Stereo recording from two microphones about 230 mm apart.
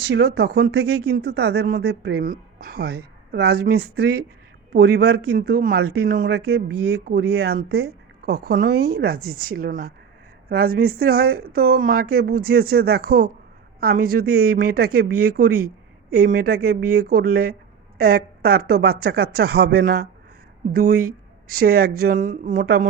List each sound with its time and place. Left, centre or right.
0.0 s speech: right